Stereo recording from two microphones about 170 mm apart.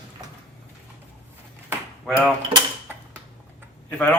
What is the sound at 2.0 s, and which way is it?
Speech, centre (ahead or behind).